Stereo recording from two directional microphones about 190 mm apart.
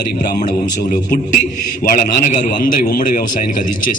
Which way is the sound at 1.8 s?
45° left (ahead or behind).